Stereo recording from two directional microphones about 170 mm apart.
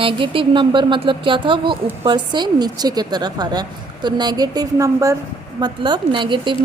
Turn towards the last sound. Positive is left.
turn(degrees=-30)  # may be behind; listen again after turning